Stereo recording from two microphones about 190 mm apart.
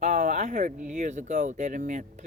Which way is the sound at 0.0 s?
40° right (ahead or behind).